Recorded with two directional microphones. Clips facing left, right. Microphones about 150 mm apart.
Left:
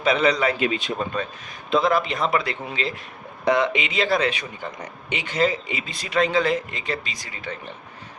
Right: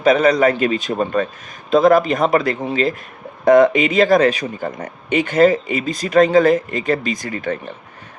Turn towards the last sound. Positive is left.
turn(degrees=-50)  # may be behind; listen again after turning